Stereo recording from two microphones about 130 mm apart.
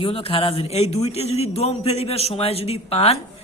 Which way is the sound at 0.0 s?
45° left (ahead or behind).